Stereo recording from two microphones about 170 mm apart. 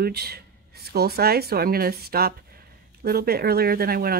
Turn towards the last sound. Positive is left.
turn(degrees=-65)  # may be behind; listen again after turning